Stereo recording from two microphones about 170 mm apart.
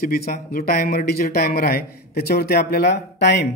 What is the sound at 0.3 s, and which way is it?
Speech, 65° left (ahead or behind).